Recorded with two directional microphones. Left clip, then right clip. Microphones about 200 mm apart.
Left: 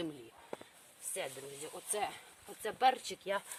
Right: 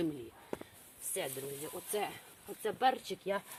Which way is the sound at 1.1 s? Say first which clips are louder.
Right 3 dB; 5° right (ahead or behind).